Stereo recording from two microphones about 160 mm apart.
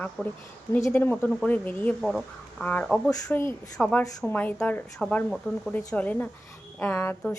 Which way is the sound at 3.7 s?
Centre (ahead or behind).